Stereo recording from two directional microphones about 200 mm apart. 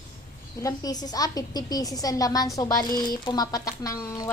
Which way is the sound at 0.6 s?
20° left (ahead or behind).